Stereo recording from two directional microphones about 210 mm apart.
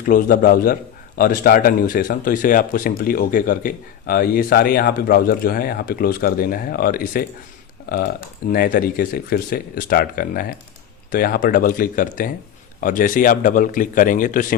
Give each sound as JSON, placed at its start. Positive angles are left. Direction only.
{"t": 0.0, "sound": "a man's voice", "side_deg": 40}